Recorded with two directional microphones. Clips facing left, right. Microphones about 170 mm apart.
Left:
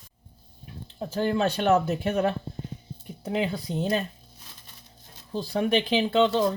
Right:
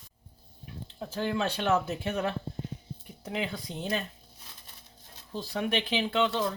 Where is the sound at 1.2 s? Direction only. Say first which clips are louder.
Left 5 dB; 45° left (ahead or behind).